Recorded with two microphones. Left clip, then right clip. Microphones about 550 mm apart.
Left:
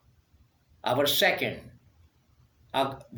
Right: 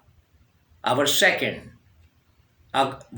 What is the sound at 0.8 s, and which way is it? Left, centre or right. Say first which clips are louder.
Speech: right 4 dB; left.